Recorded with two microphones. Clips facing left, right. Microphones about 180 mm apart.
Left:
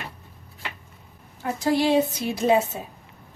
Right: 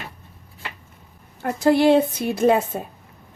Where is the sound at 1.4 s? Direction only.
60° right (ahead or behind).